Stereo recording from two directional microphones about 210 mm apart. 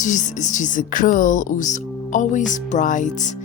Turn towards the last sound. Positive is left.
turn(degrees=35)  # may be behind; listen again after turning